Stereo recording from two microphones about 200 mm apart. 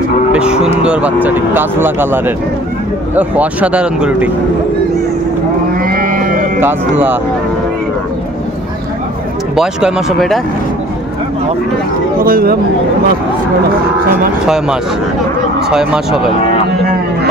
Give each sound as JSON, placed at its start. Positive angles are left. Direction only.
{"t": 0.3, "sound": "music", "side_deg": -5}
{"t": 0.8, "sound": "speech", "side_deg": -5}
{"t": 5.8, "sound": "livestock", "side_deg": -45}
{"t": 6.6, "sound": "speech", "side_deg": -10}
{"t": 9.6, "sound": "speech", "side_deg": -5}
{"t": 12.2, "sound": "speech", "side_deg": -50}
{"t": 14.1, "sound": "speech", "side_deg": -5}